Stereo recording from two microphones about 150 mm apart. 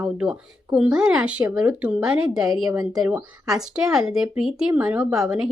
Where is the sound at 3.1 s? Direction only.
5° right (ahead or behind).